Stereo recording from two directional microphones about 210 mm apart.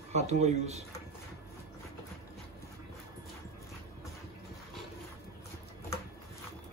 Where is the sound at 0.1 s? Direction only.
30° right (ahead or behind).